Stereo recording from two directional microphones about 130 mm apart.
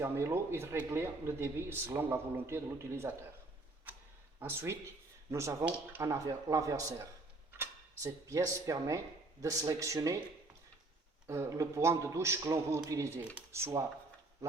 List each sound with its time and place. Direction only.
0.0 s speech: 20° right (ahead or behind)
4.4 s speech: 20° right (ahead or behind)
7.6 s cutlery: 25° right (ahead or behind)
9.4 s speech: 25° right (ahead or behind)
11.3 s speech: 25° right (ahead or behind)